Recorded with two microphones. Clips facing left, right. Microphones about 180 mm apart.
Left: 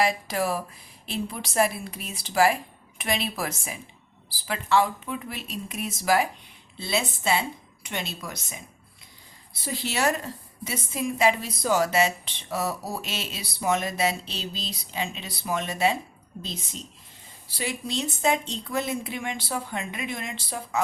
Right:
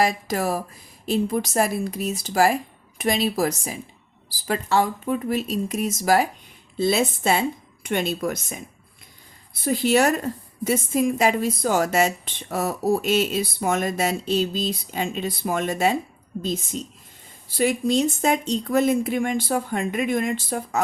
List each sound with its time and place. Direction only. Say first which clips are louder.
0.0 s a woman's voice: right 3 dB; 45° right (ahead or behind)